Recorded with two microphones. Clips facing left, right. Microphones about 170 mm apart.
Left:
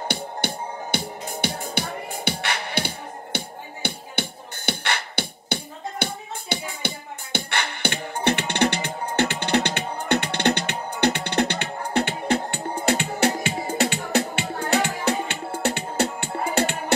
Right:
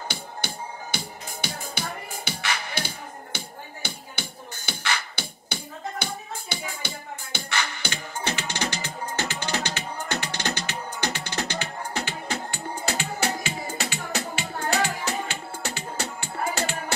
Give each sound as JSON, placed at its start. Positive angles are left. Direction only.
{"t": 0.9, "sound": "music", "side_deg": 60}
{"t": 7.3, "sound": "music", "side_deg": 60}